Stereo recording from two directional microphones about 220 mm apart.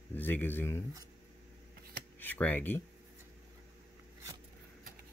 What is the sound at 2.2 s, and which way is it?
Speech, 5° left (ahead or behind).